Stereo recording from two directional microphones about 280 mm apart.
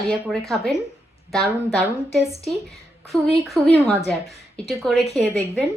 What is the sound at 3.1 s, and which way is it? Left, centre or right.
Speech, centre.